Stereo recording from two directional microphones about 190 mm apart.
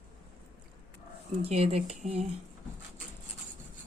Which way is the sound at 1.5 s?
35° right (ahead or behind).